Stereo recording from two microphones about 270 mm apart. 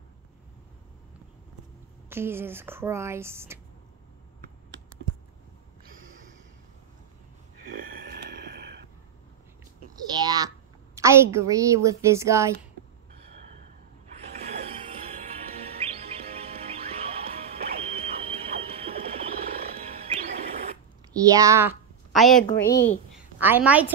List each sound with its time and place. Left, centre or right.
2.0 s speech: centre
4.4 s a sound: right
7.6 s a sound: right
10.2 s a sound: centre
11.3 s speech: centre
14.1 s music: right
21.3 s a woman's voice: centre
22.6 s a woman's voice: centre
23.4 s a woman's voice: centre